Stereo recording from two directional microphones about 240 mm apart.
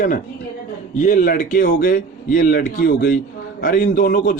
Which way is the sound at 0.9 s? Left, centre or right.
Left.